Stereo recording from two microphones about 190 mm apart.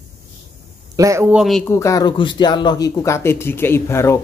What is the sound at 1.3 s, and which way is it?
Speech, centre (ahead or behind).